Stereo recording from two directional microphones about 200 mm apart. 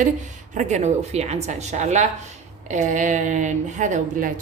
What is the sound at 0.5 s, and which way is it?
A woman's voice, 35° right (ahead or behind).